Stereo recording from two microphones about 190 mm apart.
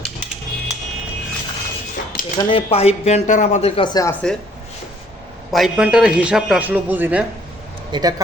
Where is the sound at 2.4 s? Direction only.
30° left (ahead or behind).